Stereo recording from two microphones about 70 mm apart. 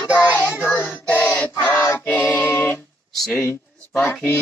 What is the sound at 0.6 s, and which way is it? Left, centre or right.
Music, left.